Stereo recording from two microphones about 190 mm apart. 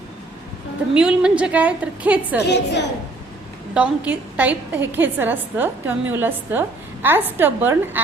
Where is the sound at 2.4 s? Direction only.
65° left (ahead or behind).